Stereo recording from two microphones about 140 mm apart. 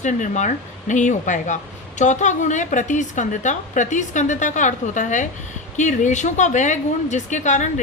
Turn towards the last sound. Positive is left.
turn(degrees=60)  # may be behind; listen again after turning